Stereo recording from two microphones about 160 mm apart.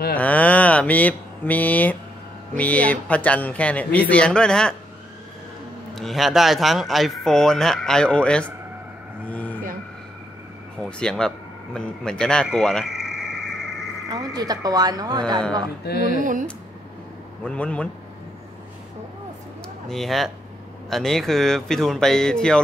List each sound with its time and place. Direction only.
0.2 s speech: 10° left (ahead or behind)
5.9 s speech: centre (ahead or behind)
9.3 s a sound: 10° left (ahead or behind)
10.8 s a sound: 5° left (ahead or behind)
14.0 s speech: 25° right (ahead or behind)
15.8 s speech: 85° left
16.2 s speech: 55° right (ahead or behind)
17.5 s speech: 5° left (ahead or behind)
19.9 s speech: centre (ahead or behind)